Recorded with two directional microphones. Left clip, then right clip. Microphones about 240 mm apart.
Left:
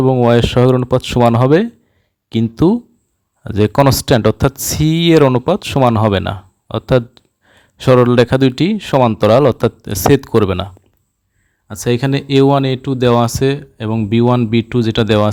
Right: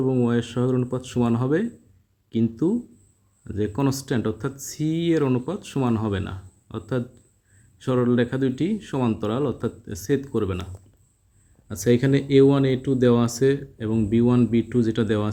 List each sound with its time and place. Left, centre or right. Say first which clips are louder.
0.0 s speech: left 12 dB; left
11.7 s speech: left 4 dB; left